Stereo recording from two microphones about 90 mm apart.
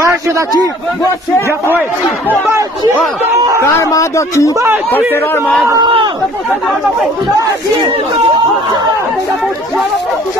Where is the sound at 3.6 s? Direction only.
30° left (ahead or behind).